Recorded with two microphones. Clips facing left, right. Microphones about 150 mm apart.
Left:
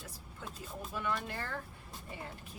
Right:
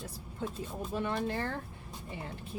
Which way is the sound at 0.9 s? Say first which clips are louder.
Right 5 dB; 30° right (ahead or behind).